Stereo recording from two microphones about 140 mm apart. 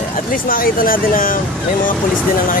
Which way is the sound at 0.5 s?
90° left.